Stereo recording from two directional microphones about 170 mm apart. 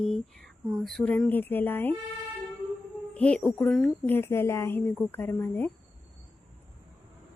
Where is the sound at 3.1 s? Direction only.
5° left (ahead or behind).